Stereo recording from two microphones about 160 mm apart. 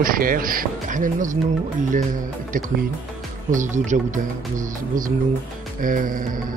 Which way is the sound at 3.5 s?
50° right (ahead or behind).